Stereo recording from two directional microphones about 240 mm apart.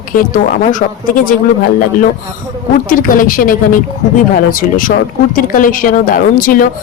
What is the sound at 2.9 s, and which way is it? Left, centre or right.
A woman's voice, left.